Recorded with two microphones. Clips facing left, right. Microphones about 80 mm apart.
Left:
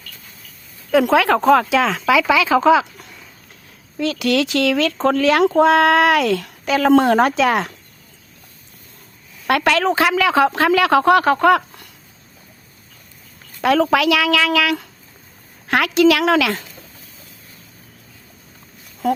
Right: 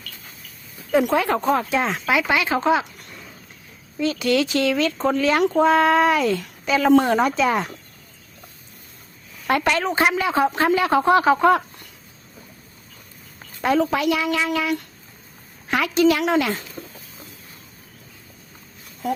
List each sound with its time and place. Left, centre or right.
0.9 s speech: left
3.9 s speech: left
9.5 s a woman's voice: left
13.6 s a woman's voice: left
13.9 s speech: left
15.6 s speech: left